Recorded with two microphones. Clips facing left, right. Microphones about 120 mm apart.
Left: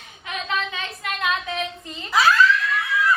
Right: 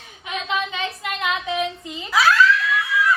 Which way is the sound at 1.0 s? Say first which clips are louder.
Left 3 dB; 20° right (ahead or behind).